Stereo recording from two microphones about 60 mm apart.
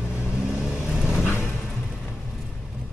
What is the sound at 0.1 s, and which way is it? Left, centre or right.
Vehicle, centre.